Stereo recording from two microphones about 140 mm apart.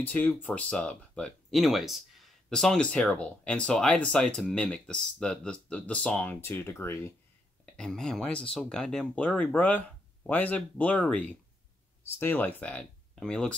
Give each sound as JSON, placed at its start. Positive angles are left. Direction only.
{"t": 0.1, "sound": "speech", "side_deg": 10}
{"t": 7.6, "sound": "speech", "side_deg": 5}